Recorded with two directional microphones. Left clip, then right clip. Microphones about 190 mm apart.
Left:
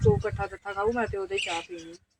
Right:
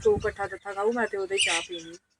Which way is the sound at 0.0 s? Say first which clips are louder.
Right 1 dB; 5° right (ahead or behind).